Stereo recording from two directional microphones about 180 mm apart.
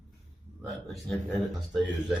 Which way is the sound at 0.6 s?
Centre (ahead or behind).